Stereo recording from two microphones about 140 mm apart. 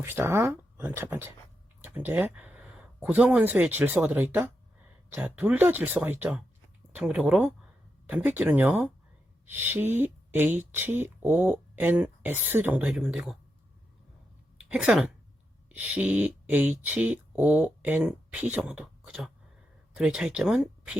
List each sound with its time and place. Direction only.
0.0 s speech: 15° right (ahead or behind)
14.7 s speech: 5° right (ahead or behind)